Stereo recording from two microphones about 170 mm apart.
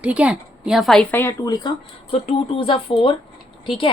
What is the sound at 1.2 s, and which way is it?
Speech, 20° left (ahead or behind).